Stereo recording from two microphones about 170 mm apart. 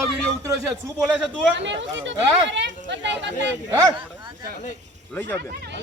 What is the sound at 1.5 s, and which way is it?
Speech, 90° right.